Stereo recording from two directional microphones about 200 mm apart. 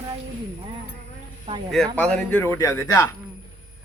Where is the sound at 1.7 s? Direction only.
5° left (ahead or behind).